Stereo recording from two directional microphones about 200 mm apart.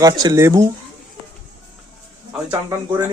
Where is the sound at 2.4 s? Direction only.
10° right (ahead or behind).